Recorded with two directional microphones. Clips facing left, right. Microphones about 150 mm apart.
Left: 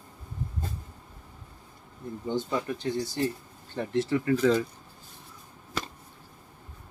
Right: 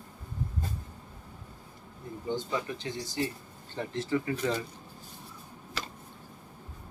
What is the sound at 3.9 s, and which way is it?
Speech, 75° left (ahead or behind).